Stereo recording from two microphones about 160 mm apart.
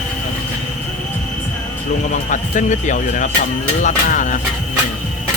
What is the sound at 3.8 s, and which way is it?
Music, 50° left (ahead or behind).